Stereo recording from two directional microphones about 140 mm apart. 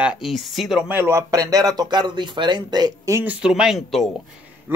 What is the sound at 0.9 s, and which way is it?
Speech, 20° right (ahead or behind).